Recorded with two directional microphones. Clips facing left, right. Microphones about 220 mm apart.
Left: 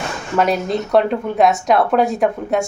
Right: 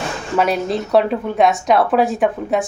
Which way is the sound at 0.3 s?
Centre (ahead or behind).